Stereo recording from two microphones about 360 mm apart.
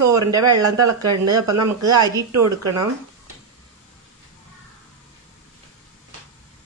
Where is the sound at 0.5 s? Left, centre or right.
Right.